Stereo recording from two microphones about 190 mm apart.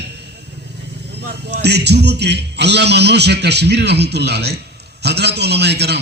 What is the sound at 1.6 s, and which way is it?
A man's voice, 60° right (ahead or behind).